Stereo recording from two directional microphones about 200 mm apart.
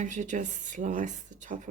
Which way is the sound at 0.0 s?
40° right (ahead or behind).